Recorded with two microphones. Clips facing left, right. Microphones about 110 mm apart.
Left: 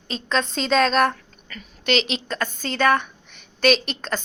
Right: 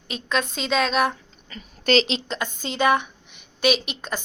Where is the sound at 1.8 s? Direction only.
35° right (ahead or behind).